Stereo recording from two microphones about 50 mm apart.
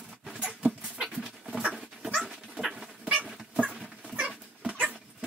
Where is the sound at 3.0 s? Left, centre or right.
Right.